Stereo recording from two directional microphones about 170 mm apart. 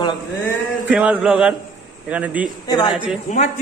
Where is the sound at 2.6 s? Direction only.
25° left (ahead or behind).